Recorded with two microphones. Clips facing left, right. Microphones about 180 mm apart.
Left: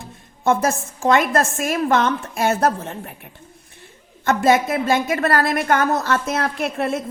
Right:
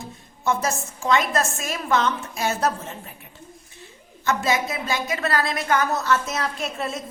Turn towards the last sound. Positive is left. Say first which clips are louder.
# left 6 dB
turn(degrees=60)  # may be behind; listen again after turning